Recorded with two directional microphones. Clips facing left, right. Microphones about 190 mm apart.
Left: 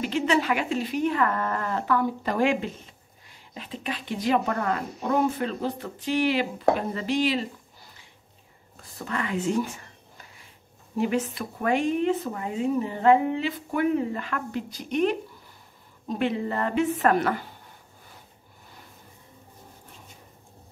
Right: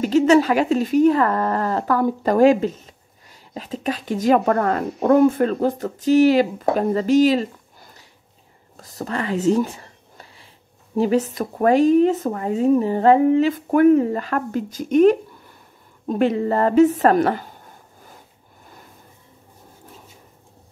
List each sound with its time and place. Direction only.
0.0 s speech: 40° right (ahead or behind)
11.0 s speech: 35° right (ahead or behind)